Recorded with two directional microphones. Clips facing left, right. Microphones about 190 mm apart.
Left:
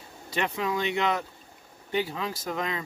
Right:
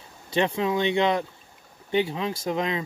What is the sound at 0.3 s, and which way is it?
Speech, 30° right (ahead or behind).